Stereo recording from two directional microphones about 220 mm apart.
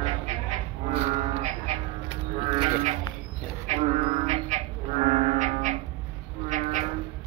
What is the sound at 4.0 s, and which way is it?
Livestock, 30° right (ahead or behind).